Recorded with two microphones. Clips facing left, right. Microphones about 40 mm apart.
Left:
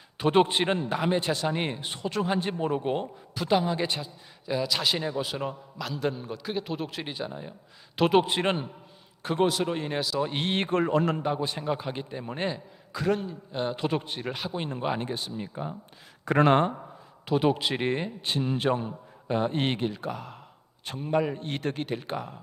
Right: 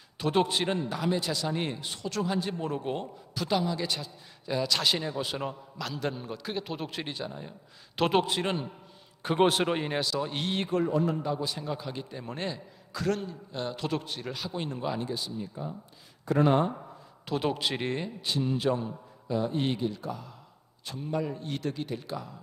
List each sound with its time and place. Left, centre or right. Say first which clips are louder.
0.2 s a man's voice: left 4 dB; left
4.4 s a man's voice: left 1 dB; centre
8.3 s a man's voice: left 3 dB; left
9.4 s speech: right 1 dB; right
9.8 s a man's voice: even; centre
10.3 s speech: left 3 dB; left
11.3 s a man's voice: left 4 dB; left
12.1 s a man's voice: left 4 dB; centre; by 15.7 s left
16.2 s speech: left 3 dB; left
17.2 s speech: left 5 dB; centre
17.8 s speech: left 3 dB; left
21.1 s speech: left 5 dB; left